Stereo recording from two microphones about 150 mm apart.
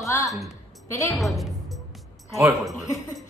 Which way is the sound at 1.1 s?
Centre (ahead or behind).